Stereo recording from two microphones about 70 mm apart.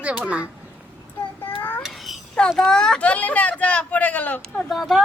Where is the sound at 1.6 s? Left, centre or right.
Left.